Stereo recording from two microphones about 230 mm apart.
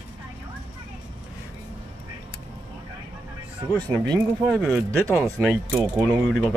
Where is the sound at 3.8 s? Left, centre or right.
Centre.